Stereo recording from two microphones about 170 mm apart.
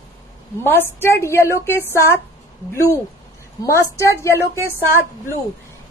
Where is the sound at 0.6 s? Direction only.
15° left (ahead or behind).